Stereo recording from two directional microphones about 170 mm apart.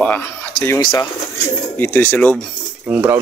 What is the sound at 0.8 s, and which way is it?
Speech, 25° left (ahead or behind).